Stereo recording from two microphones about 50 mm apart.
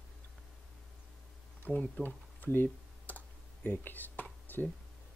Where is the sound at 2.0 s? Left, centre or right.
Left.